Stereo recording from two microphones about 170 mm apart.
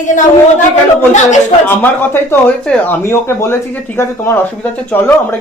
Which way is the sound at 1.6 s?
10° left (ahead or behind).